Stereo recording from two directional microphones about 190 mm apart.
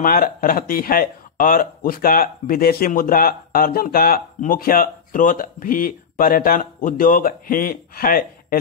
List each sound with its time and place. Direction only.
0.0 s speech: 50° left (ahead or behind)